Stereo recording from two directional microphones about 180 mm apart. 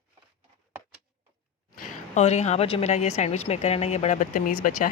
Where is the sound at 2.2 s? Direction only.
40° left (ahead or behind).